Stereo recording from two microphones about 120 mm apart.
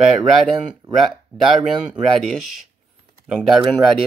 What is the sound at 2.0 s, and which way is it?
Speech, centre (ahead or behind).